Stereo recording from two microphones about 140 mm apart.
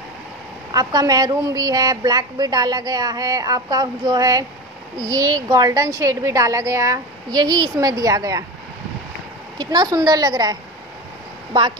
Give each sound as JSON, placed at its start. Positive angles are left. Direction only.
{"t": 0.7, "sound": "a woman's voice", "side_deg": -30}
{"t": 9.6, "sound": "a woman's voice", "side_deg": -30}